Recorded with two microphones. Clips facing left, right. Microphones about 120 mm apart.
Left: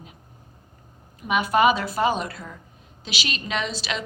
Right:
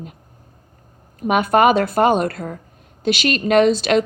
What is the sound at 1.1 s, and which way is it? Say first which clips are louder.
A woman's voice: right 6 dB; 50° right (ahead or behind).